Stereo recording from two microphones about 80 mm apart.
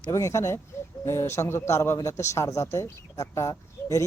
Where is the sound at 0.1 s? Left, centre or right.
Left.